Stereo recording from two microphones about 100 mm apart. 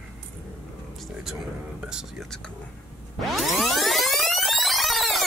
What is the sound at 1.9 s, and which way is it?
Whispering, 5° right (ahead or behind).